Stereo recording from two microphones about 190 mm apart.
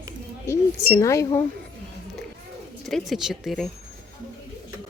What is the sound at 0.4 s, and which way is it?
Speech, 15° left (ahead or behind).